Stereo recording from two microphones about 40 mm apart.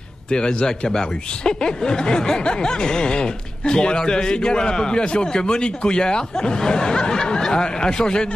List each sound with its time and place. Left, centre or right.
0.3 s speech: centre